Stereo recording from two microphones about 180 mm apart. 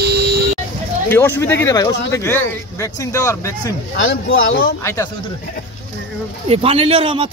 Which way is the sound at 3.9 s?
90° left.